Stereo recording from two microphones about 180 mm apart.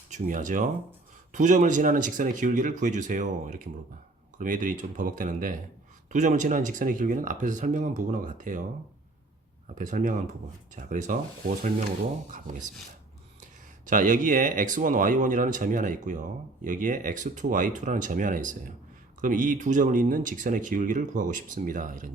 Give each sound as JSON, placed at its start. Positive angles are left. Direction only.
{"t": 0.1, "sound": "speech", "side_deg": -45}
{"t": 9.7, "sound": "speech", "side_deg": -45}
{"t": 13.8, "sound": "speech", "side_deg": -45}